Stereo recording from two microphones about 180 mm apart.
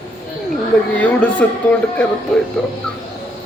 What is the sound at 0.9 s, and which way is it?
A man's voice, 5° left (ahead or behind).